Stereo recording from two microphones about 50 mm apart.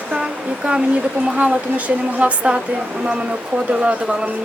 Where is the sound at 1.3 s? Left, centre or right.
Right.